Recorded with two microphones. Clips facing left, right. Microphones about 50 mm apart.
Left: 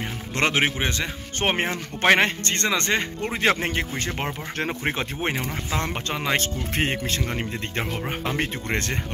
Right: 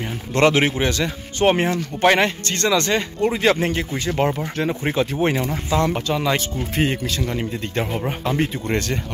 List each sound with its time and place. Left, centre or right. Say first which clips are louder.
0.3 s speech: right 6 dB; left
5.2 s speech: right 4 dB; centre
5.7 s speech: right 9 dB; left
6.3 s speech: right 2 dB; left
6.9 s speech: right 3 dB; left